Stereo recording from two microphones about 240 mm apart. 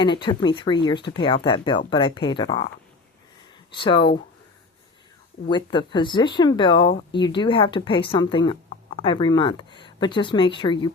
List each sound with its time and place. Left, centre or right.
0.0 s speech: centre
3.7 s speech: centre
5.5 s speech: centre